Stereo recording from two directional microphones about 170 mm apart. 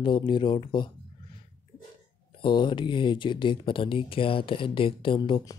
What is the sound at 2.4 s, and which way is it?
Speech, 30° left (ahead or behind).